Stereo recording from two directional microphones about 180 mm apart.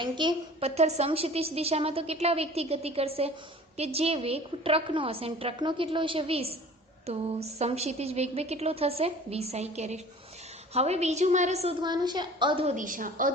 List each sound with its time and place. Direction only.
0.0 s a woman's voice: 25° right (ahead or behind)
11.8 s a woman's voice: 25° right (ahead or behind)
12.7 s a woman's voice: 45° right (ahead or behind)